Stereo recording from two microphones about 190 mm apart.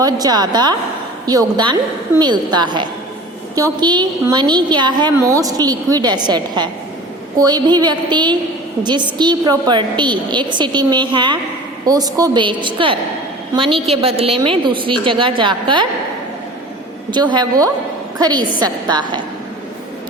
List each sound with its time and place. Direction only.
0.0 s a woman's voice: 20° right (ahead or behind)
17.1 s a woman's voice: 25° right (ahead or behind)